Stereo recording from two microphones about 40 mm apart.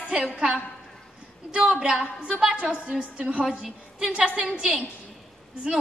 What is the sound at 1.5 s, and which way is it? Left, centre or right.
Speech, right.